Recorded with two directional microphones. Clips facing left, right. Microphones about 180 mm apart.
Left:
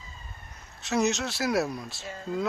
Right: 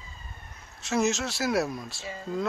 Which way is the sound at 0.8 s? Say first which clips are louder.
Even; centre (ahead or behind).